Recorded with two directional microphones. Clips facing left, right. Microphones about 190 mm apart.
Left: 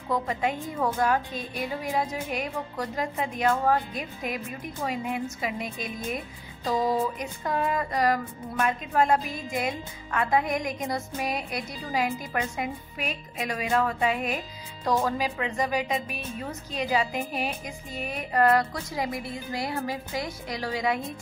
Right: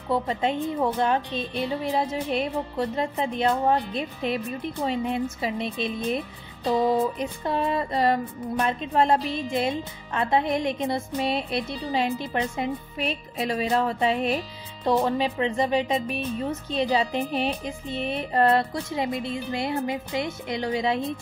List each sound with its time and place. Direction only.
0.1 s speech: 30° right (ahead or behind)